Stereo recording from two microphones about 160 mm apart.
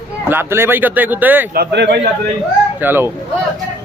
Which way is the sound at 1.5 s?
85° right.